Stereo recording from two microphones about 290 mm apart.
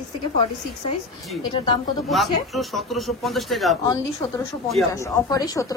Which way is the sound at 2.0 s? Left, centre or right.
Centre.